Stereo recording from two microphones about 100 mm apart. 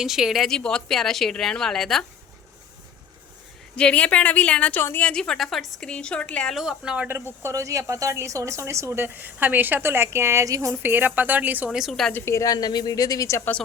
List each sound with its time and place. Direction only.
0.0 s speech: 5° right (ahead or behind)
3.8 s a woman's voice: 10° left (ahead or behind)
6.6 s a woman's voice: 5° right (ahead or behind)
7.4 s a woman's voice: 30° right (ahead or behind)
10.8 s a woman's voice: 20° right (ahead or behind)
11.8 s speech: 5° left (ahead or behind)
12.1 s a woman's voice: 30° left (ahead or behind)